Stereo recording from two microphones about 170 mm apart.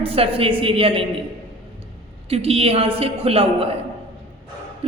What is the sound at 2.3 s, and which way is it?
A woman's voice, 35° right (ahead or behind).